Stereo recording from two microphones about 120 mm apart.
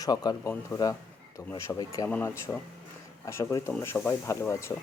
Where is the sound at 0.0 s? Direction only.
35° left (ahead or behind).